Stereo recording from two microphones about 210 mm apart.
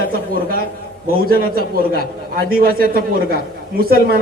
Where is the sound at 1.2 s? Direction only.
45° right (ahead or behind).